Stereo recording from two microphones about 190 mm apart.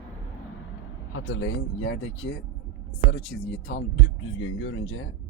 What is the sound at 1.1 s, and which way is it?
Speech, 90° left.